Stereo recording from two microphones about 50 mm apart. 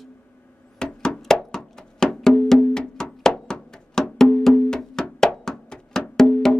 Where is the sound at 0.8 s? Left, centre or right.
Centre.